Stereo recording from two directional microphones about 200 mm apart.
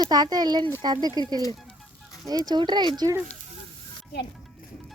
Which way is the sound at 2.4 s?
20° right (ahead or behind).